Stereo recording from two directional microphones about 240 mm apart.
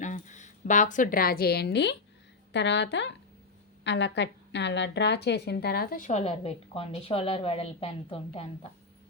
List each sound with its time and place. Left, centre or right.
0.0 s a woman's voice: left